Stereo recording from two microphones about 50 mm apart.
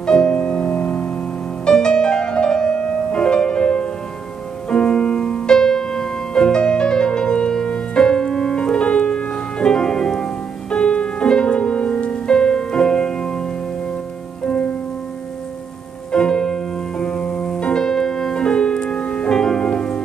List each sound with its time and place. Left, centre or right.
0.0 s music: centre
1.7 s music: centre
14.4 s music: left
16.1 s music: centre